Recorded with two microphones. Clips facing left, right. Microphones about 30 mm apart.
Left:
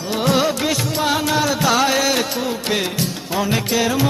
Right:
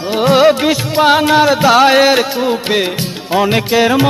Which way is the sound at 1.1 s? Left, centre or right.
Right.